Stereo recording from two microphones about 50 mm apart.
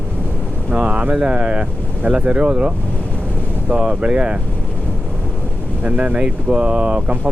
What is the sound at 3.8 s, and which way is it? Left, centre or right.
Speech, right.